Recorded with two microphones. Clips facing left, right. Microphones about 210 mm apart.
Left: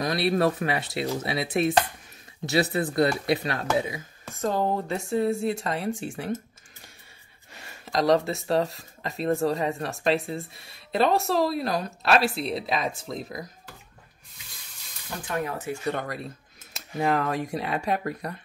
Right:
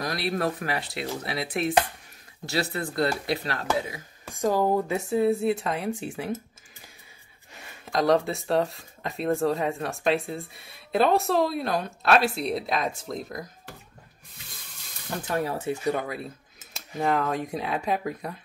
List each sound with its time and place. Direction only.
0.0 s speech: 25° left (ahead or behind)
4.3 s speech: 10° right (ahead or behind)
7.6 s speech: centre (ahead or behind)
15.2 s speech: 30° right (ahead or behind)
15.8 s speech: 5° right (ahead or behind)